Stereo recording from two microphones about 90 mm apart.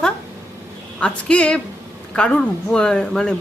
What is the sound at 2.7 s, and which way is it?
Speech, 10° left (ahead or behind).